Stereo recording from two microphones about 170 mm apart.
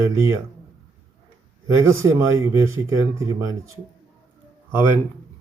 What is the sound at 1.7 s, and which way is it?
Speech, 15° right (ahead or behind).